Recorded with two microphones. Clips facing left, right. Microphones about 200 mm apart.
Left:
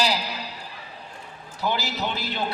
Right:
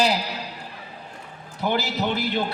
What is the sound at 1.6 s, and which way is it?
Speech, 55° right (ahead or behind).